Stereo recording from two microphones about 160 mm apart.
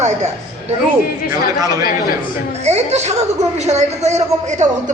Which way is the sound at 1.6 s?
25° right (ahead or behind).